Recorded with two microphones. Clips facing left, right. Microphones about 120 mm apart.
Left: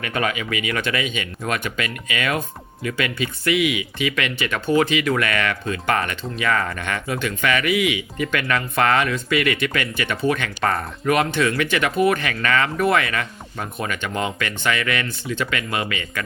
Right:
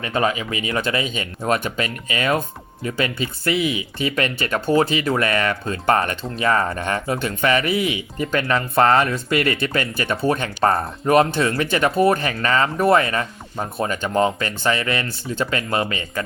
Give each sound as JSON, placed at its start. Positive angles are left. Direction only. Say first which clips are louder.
{"t": 0.0, "sound": "speech", "louder": "right 3 dB", "side_deg": -30}